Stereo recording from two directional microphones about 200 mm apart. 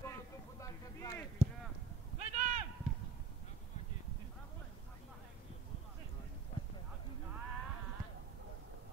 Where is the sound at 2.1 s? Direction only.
35° right (ahead or behind).